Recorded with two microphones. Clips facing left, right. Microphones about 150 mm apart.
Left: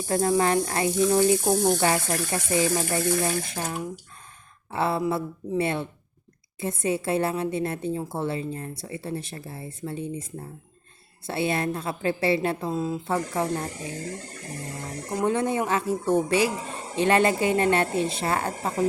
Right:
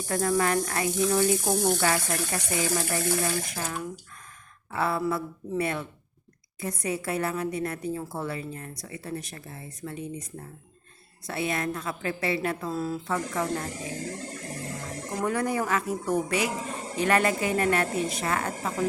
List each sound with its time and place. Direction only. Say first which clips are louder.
0.0 s speech: left 3 dB; 25° left (ahead or behind)
15.2 s speech: left 3 dB; 25° left (ahead or behind)